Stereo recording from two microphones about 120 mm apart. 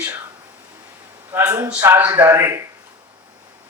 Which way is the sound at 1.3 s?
15° right (ahead or behind).